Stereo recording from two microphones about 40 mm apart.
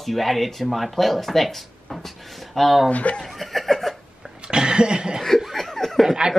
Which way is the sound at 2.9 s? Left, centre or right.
Left.